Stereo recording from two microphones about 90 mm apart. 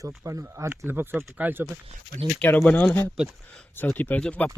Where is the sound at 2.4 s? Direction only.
20° left (ahead or behind).